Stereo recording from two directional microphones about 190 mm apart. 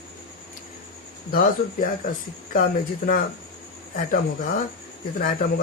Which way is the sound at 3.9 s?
45° left (ahead or behind).